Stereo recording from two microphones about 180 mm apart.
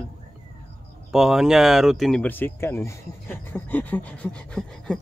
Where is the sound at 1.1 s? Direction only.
Centre (ahead or behind).